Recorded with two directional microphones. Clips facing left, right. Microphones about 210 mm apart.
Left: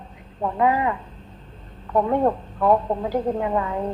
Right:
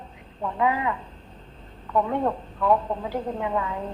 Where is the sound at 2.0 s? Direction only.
40° left (ahead or behind).